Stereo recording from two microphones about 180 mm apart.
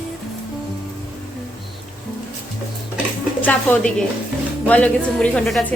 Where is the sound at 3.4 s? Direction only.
10° left (ahead or behind).